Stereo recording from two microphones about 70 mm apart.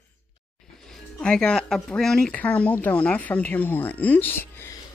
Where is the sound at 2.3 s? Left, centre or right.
Centre.